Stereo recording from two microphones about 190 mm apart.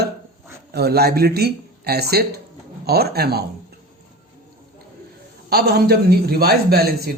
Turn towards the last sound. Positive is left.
turn(degrees=-55)  # may be behind; listen again after turning